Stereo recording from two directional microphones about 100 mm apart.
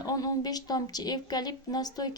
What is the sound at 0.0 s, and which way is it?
Speech, 40° left (ahead or behind).